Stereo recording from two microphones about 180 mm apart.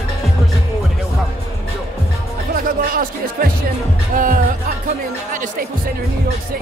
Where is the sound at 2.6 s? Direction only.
50° right (ahead or behind).